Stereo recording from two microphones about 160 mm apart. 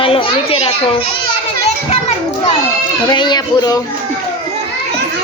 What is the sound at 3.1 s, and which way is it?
Speech, 30° left (ahead or behind).